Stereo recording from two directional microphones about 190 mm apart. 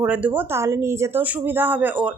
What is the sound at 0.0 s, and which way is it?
A woman's voice, 5° right (ahead or behind).